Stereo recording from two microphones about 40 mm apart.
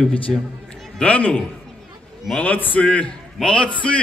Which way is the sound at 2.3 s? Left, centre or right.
Left.